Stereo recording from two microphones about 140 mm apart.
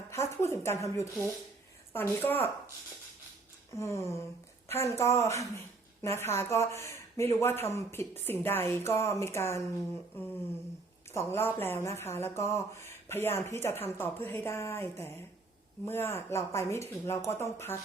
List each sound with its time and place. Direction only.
0.1 s speech: 20° left (ahead or behind)
3.8 s speech: 20° left (ahead or behind)
11.1 s speech: 20° left (ahead or behind)